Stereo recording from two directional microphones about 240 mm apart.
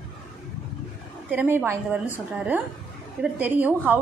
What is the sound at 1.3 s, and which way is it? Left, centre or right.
A woman's voice, centre.